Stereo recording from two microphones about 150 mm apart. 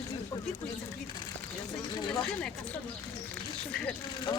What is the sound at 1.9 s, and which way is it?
Speech, 30° left (ahead or behind).